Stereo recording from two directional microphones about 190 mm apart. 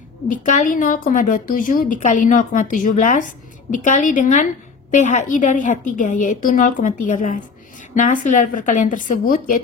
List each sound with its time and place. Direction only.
0.3 s a woman's voice: 45° left (ahead or behind)